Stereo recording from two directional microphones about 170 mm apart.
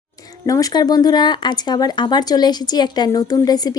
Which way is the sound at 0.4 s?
20° left (ahead or behind).